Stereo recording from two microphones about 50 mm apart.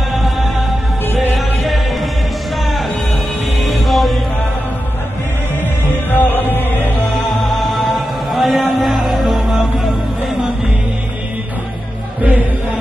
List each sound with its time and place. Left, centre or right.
1.3 s music: centre
3.6 s music: centre
5.6 s music: left
7.2 s music: centre
12.2 s music: right